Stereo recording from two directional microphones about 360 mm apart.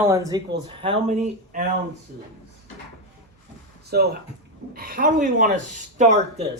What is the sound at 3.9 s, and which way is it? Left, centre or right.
Speech, right.